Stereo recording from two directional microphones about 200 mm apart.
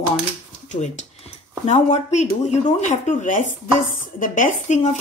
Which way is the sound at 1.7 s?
35° left (ahead or behind).